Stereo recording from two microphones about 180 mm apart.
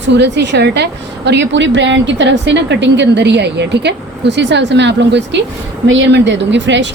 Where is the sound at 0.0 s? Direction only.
75° right (ahead or behind).